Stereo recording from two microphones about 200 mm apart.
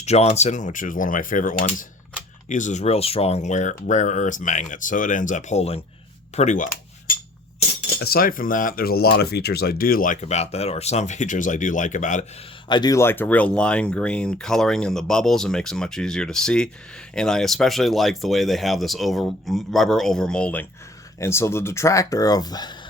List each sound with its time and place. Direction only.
0.0 s speech: 35° left (ahead or behind)
7.9 s speech: 50° left (ahead or behind)
12.6 s speech: 20° left (ahead or behind)